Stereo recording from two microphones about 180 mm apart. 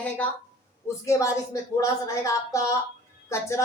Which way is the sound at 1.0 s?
15° left (ahead or behind).